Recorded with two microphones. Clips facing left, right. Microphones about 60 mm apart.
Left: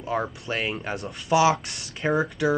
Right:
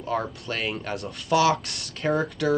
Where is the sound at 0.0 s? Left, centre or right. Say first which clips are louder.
Even; centre.